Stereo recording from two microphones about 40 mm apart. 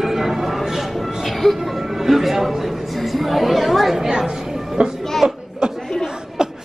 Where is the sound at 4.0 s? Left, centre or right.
Centre.